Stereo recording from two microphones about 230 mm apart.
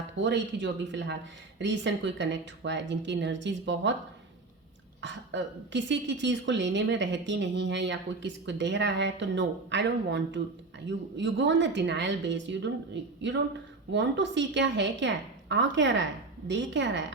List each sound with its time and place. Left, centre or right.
0.2 s a woman's voice: right
4.9 s a woman's voice: right